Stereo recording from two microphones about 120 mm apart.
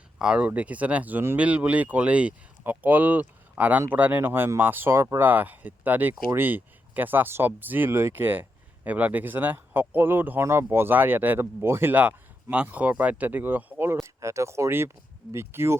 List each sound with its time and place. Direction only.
0.2 s speech: 10° right (ahead or behind)